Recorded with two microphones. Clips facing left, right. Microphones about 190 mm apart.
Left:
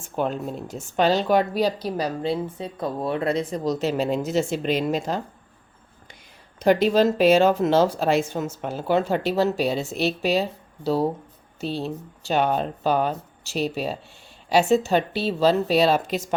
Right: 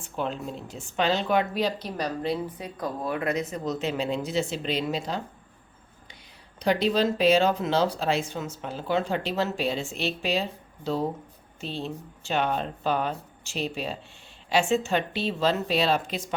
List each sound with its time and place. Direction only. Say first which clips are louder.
0.0 s a woman's voice: left 5 dB; 45° left (ahead or behind)
6.6 s a woman's voice: left 5 dB; 50° left (ahead or behind)